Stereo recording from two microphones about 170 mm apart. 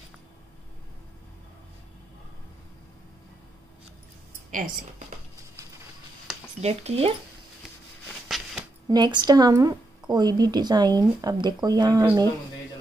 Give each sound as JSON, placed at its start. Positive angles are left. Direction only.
{"t": 6.6, "sound": "speech", "side_deg": -40}
{"t": 8.1, "sound": "a sound", "side_deg": 0}
{"t": 8.8, "sound": "a woman's voice", "side_deg": -25}